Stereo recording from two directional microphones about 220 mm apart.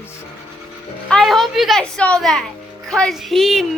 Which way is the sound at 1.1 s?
Centre (ahead or behind).